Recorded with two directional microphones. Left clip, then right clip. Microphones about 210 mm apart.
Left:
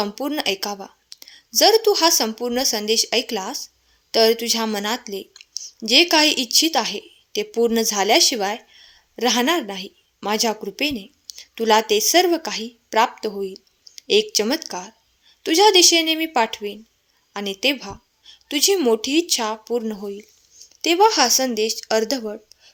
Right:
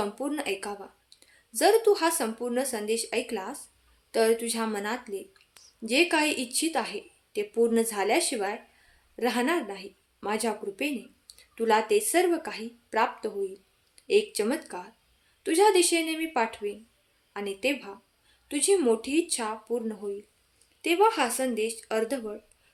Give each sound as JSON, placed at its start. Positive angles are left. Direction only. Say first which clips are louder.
{"t": 0.0, "sound": "a woman's voice", "louder": "left 8 dB", "side_deg": 40}